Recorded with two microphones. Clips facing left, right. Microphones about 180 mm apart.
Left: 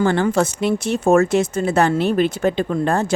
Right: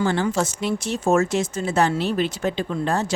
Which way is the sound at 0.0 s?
55° left (ahead or behind).